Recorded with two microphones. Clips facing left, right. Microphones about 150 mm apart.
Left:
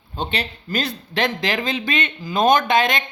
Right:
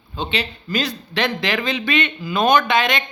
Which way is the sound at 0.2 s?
55° left (ahead or behind).